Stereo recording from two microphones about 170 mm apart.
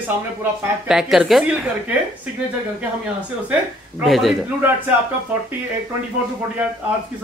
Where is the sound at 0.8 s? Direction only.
5° right (ahead or behind).